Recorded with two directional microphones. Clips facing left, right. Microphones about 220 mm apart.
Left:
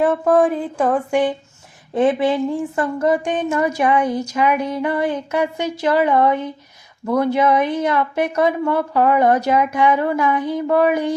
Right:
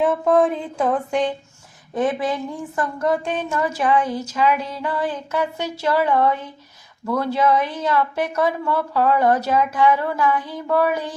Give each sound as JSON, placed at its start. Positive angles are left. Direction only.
{"t": 0.0, "sound": "a woman's voice", "side_deg": 5}
{"t": 1.9, "sound": "speech", "side_deg": 25}
{"t": 4.0, "sound": "a woman's voice", "side_deg": 15}